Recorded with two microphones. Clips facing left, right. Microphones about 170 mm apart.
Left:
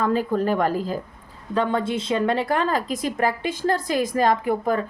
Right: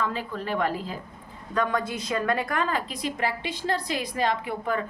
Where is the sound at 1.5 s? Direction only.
25° left (ahead or behind).